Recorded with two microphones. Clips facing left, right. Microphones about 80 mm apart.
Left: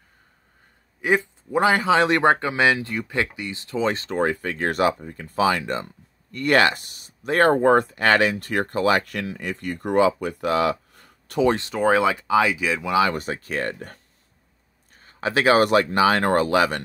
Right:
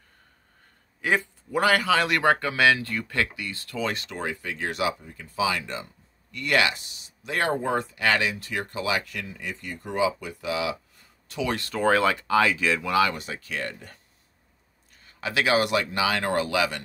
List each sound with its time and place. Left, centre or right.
1.0 s a man's voice: centre; by 10.3 s left
10.4 s a sound: left
11.4 s speech: left
13.1 s speech: left
15.0 s speech: left